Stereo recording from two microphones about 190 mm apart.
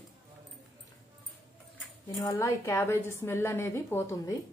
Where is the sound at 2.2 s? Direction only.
20° left (ahead or behind).